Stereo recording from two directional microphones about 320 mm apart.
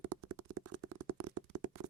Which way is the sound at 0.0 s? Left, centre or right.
Right.